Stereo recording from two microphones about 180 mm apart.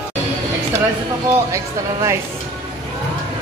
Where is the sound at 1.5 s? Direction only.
15° right (ahead or behind).